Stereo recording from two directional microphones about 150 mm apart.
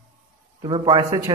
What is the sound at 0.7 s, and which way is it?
Speech, 30° right (ahead or behind).